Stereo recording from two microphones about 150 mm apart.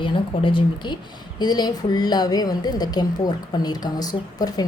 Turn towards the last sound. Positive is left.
turn(degrees=25)  # may be behind; listen again after turning